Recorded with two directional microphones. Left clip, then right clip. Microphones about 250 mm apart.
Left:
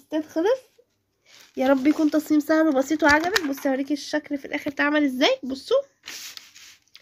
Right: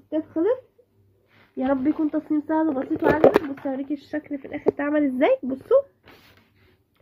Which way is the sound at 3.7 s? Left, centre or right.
Left.